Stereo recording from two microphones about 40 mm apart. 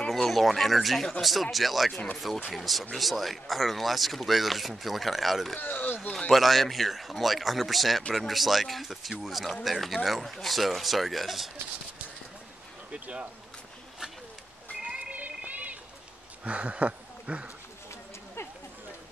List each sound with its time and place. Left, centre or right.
0.1 s speech: centre
5.6 s speech: left
6.3 s speech: centre
14.9 s a sound: right
16.4 s speech: right